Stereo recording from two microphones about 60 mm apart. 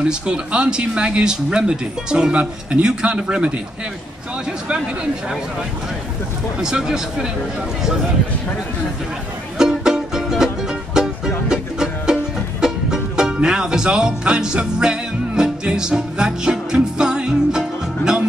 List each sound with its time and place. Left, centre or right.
0.0 s speech: centre
6.6 s speech: centre
9.6 s music: centre